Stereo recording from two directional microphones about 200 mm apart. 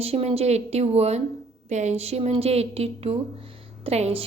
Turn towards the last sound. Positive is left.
turn(degrees=-30)  # may be behind; listen again after turning